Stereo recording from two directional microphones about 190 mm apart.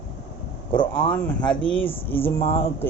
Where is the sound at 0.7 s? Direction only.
25° left (ahead or behind).